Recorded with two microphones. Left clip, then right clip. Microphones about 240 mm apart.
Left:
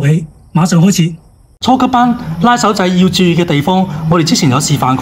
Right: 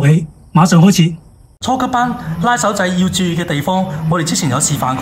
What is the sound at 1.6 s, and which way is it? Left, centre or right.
A man's voice, left.